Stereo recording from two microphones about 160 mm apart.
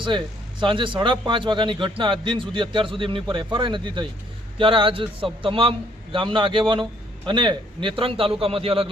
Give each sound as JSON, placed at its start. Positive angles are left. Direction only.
{"t": 0.6, "sound": "a man's voice", "side_deg": -30}